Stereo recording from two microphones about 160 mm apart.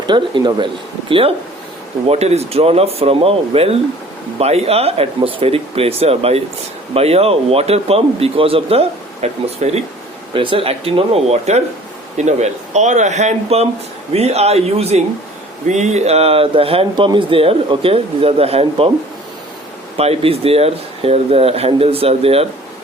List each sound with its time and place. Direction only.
0.0 s speech: 30° right (ahead or behind)
2.0 s speech: 40° right (ahead or behind)
20.0 s speech: 40° right (ahead or behind)